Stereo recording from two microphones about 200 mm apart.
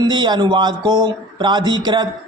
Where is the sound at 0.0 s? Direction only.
20° right (ahead or behind).